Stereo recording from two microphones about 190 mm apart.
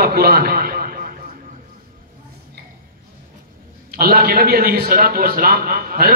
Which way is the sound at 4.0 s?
50° right (ahead or behind).